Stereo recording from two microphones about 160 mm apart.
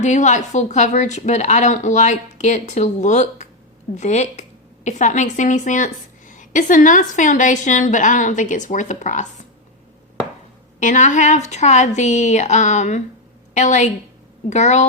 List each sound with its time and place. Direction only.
0.0 s a woman's voice: 50° left (ahead or behind)
10.8 s a woman's voice: 50° left (ahead or behind)